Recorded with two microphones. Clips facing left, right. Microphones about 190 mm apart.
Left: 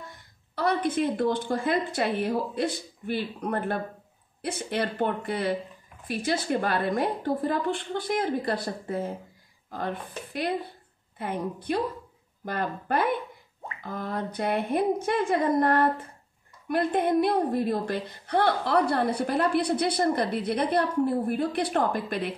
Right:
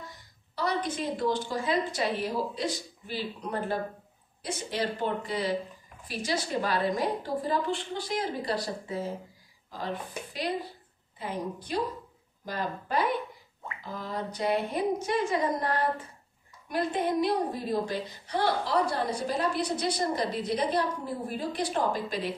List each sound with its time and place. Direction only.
0.6 s a woman's voice: 55° left (ahead or behind)
11.1 s a woman's voice: 60° left (ahead or behind)